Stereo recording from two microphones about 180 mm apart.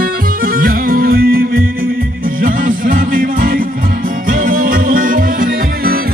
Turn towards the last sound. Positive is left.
turn(degrees=-55)  # may be behind; listen again after turning